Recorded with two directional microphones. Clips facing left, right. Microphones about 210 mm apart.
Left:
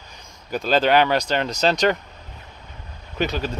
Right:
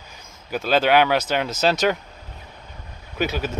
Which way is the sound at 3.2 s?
5° right (ahead or behind).